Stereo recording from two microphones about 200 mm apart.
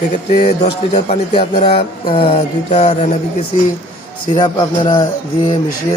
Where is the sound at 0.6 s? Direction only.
30° left (ahead or behind).